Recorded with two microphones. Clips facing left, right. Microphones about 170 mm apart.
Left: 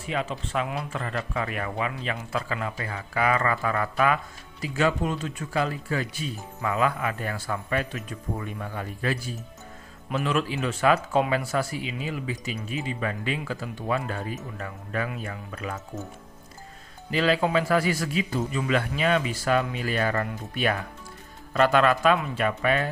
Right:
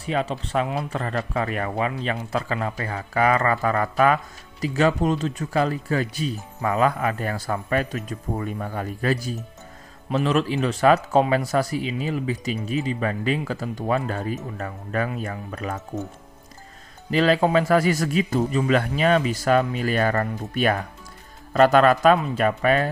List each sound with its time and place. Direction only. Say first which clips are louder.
0.0 s speech: right 4 dB; 35° right (ahead or behind)
17.1 s a man's voice: right 4 dB; 40° right (ahead or behind)